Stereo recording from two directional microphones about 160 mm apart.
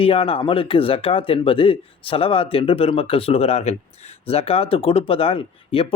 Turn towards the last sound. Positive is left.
turn(degrees=35)  # may be behind; listen again after turning